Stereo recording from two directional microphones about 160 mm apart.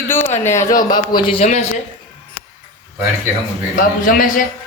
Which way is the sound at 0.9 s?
25° left (ahead or behind).